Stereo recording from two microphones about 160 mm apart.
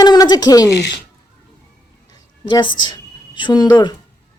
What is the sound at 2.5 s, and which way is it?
Speech, 30° left (ahead or behind).